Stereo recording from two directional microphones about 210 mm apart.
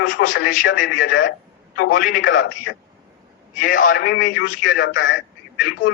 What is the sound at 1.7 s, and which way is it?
Speech, 40° left (ahead or behind).